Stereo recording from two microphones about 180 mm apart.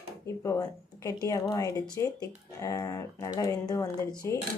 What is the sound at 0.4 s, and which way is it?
A woman's voice, 15° left (ahead or behind).